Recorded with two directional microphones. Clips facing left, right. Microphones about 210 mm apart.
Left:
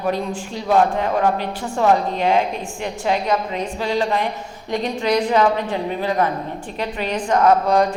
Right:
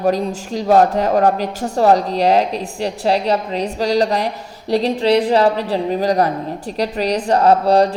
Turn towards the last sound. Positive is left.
turn(degrees=-35)  # may be behind; listen again after turning